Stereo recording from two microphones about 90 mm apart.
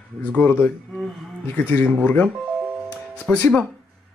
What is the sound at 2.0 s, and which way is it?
Speech, 15° left (ahead or behind).